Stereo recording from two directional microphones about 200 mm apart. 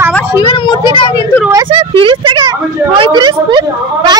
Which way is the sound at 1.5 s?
25° right (ahead or behind).